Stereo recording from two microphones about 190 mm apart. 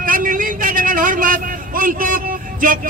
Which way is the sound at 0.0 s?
45° right (ahead or behind).